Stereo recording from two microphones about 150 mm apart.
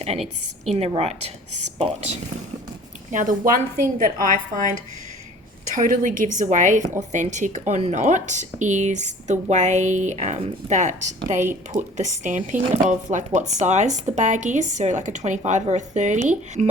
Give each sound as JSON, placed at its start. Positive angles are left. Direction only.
{"t": 0.0, "sound": "speech", "side_deg": -45}
{"t": 3.1, "sound": "a woman's voice", "side_deg": -60}
{"t": 5.7, "sound": "a woman's voice", "side_deg": -60}